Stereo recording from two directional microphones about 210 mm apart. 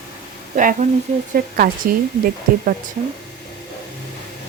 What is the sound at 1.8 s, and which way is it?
Speech, 40° right (ahead or behind).